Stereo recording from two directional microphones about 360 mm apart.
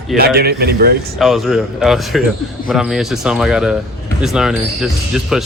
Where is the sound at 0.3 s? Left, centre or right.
Right.